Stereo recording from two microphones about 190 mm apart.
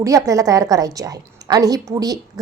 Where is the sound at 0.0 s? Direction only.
15° right (ahead or behind).